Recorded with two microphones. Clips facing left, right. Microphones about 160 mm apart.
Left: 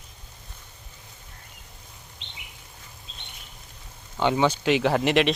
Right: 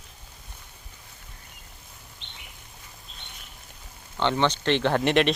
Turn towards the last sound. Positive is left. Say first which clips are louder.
# left 1 dB
turn(degrees=0)  # may be behind; listen again after turning